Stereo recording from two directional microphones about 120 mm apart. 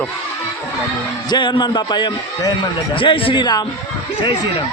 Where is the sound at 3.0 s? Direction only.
45° left (ahead or behind).